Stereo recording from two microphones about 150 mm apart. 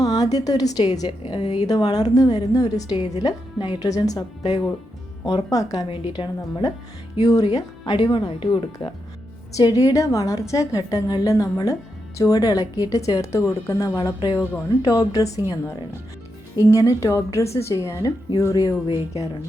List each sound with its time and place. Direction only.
0.0 s a woman's voice: 25° left (ahead or behind)
16.6 s a woman's voice: 20° left (ahead or behind)